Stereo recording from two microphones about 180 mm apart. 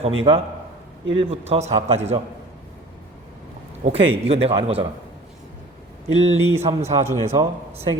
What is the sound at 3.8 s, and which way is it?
A man's voice, 35° right (ahead or behind).